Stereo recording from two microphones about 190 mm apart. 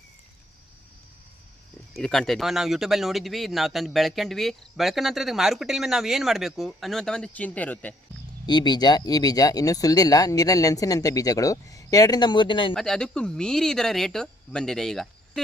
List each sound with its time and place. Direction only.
1.9 s speech: 5° left (ahead or behind)
8.4 s speech: 20° left (ahead or behind)
12.7 s speech: centre (ahead or behind)